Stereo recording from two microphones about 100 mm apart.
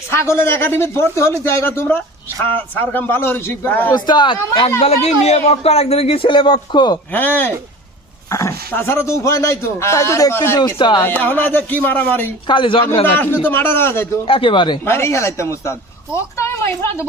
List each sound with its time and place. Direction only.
0.1 s speech: 25° left (ahead or behind)
3.9 s speech: 45° left (ahead or behind)
4.8 s speech: 90° left; by 7.0 s 45° left (ahead or behind)
7.1 s speech: 20° left (ahead or behind)
8.3 s speech: 30° left (ahead or behind)
10.6 s speech: 50° left (ahead or behind)
11.0 s speech: 15° left (ahead or behind)
12.5 s a man's voice: 55° left (ahead or behind)
13.1 s speech: 20° left (ahead or behind)
14.3 s a man's voice: 60° left (ahead or behind)
14.8 s a woman's voice: 25° left (ahead or behind)